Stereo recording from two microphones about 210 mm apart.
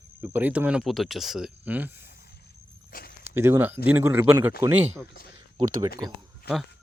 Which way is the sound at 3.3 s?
10° right (ahead or behind).